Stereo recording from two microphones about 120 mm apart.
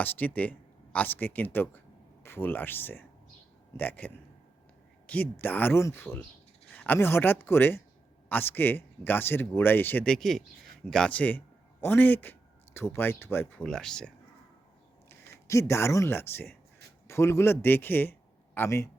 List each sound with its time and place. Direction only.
0.0 s a man's voice: 15° left (ahead or behind)
13.6 s speech: 5° left (ahead or behind)
15.1 s a man's voice: 25° left (ahead or behind)